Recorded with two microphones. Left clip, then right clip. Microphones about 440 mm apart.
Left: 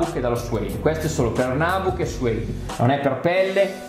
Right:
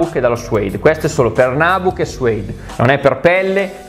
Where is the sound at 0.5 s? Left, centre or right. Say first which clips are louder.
Right 10 dB; right.